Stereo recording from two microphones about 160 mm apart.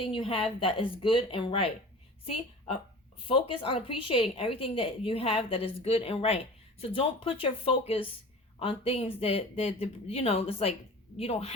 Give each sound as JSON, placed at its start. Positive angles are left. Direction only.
{"t": 0.1, "sound": "a woman's voice", "side_deg": 35}